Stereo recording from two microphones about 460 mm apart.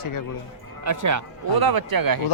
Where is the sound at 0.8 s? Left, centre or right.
Right.